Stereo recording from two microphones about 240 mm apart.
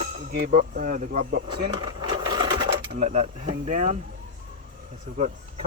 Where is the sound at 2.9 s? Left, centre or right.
Right.